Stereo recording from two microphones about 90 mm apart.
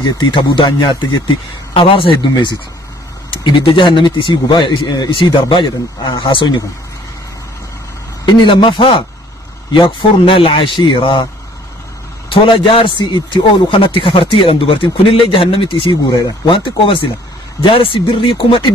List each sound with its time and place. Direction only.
0.3 s a man's voice: 70° left (ahead or behind)
1.7 s speech: 90° left; by 2.5 s 75° left (ahead or behind)
3.4 s speech: 65° left (ahead or behind)
8.3 s a man's voice: 60° left (ahead or behind); by 10.7 s 90° left
10.8 s speech: 65° left (ahead or behind)
12.3 s a man's voice: 75° left (ahead or behind)